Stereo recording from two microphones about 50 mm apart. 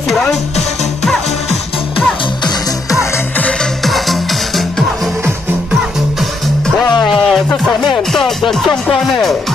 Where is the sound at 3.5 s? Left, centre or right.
Centre.